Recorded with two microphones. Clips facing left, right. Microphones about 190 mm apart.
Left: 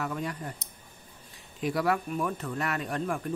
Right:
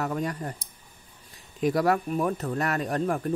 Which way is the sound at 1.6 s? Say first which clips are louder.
Right 4 dB; 40° right (ahead or behind).